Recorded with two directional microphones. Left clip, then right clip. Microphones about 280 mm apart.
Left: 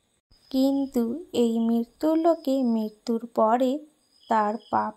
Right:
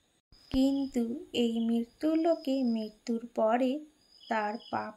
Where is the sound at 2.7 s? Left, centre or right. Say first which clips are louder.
Left 7 dB; centre.